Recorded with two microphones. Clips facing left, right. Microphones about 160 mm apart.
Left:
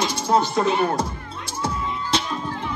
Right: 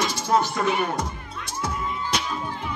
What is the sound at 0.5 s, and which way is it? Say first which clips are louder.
Speech: left 4 dB; 30° left (ahead or behind).